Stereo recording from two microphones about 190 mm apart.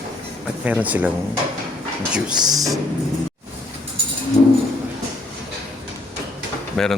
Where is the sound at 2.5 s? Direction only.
20° right (ahead or behind).